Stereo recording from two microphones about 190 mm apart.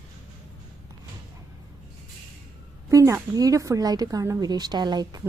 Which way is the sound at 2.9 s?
15° right (ahead or behind).